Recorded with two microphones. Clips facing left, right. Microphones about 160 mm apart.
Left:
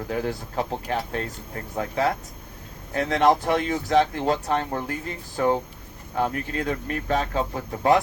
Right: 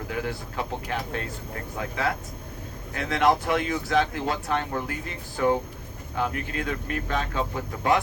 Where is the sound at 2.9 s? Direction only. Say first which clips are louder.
Left 3 dB; 35° left (ahead or behind).